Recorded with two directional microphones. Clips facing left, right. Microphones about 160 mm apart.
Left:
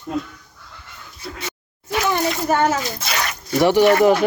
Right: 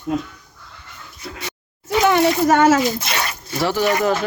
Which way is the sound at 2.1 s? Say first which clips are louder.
Right 5 dB; 80° right.